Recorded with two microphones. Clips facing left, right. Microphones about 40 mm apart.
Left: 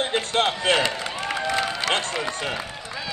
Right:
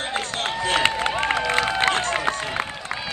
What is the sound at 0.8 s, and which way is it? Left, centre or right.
Run, right.